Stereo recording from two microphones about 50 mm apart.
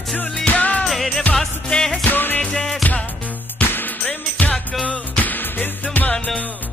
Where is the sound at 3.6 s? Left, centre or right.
Left.